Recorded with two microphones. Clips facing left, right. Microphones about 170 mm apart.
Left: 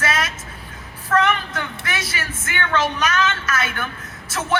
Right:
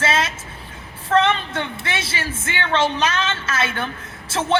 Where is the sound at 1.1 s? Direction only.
25° right (ahead or behind).